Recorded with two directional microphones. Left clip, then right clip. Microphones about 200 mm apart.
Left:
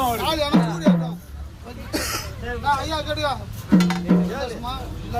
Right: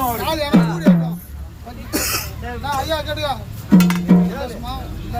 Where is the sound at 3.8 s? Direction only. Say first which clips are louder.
Right 4 dB; 35° right (ahead or behind).